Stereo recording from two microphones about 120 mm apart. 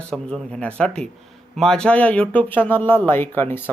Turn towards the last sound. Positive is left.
turn(degrees=15)  # may be behind; listen again after turning